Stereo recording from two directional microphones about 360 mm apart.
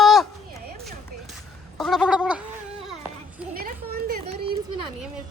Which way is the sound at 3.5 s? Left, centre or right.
Right.